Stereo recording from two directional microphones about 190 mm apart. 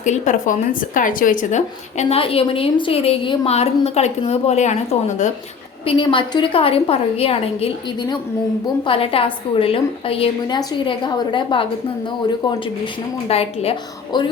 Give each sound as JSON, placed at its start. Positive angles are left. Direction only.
{"t": 0.0, "sound": "speech", "side_deg": 40}
{"t": 5.8, "sound": "a woman's voice", "side_deg": 25}
{"t": 8.9, "sound": "a woman's voice", "side_deg": 30}